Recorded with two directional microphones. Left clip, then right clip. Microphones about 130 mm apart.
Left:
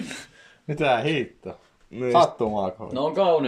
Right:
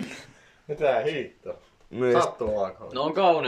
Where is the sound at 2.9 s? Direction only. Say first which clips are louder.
Left 1 dB; 70° left (ahead or behind).